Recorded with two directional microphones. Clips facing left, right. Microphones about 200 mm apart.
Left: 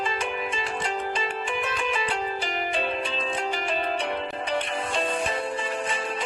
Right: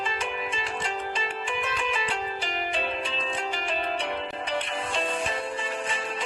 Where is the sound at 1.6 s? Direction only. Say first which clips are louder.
Left 2 dB; 40° left (ahead or behind).